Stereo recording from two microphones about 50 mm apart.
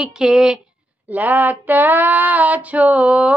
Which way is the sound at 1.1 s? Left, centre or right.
Right.